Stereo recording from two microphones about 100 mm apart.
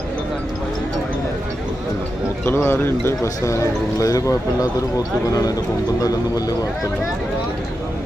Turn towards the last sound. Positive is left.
turn(degrees=40)  # may be behind; listen again after turning